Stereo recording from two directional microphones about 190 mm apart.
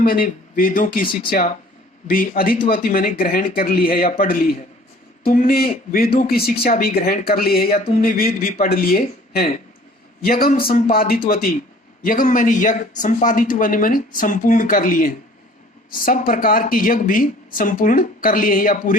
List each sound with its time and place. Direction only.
0.0 s speech: 50° left (ahead or behind)